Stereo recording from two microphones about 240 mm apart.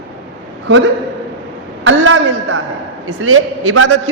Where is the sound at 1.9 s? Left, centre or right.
Right.